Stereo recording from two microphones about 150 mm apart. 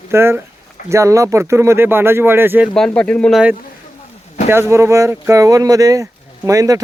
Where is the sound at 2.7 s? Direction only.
5° left (ahead or behind).